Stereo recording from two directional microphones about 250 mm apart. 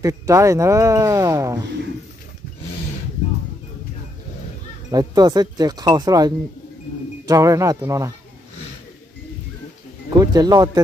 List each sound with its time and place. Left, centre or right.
0.0 s speech: centre
4.9 s speech: centre
10.1 s speech: centre